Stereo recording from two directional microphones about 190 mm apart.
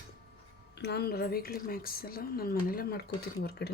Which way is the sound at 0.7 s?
60° left (ahead or behind).